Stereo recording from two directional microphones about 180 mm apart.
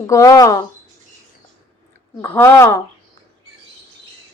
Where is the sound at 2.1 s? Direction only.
10° left (ahead or behind).